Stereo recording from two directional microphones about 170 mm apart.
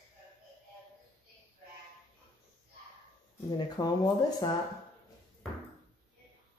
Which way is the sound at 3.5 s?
25° left (ahead or behind).